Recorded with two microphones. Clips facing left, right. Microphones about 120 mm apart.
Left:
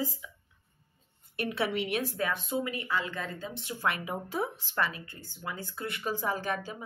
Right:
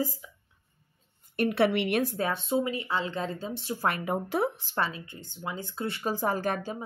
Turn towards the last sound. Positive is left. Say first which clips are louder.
# right 3 dB
turn(degrees=-45)  # may be behind; listen again after turning